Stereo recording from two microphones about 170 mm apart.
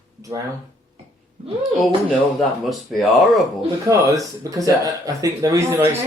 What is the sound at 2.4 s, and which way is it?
Speech, centre (ahead or behind).